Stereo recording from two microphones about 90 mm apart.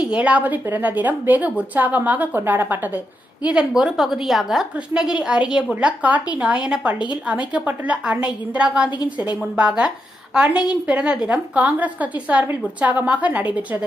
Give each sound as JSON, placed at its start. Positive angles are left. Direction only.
{"t": 0.0, "sound": "a woman's voice", "side_deg": -15}
{"t": 3.4, "sound": "a woman's voice", "side_deg": -10}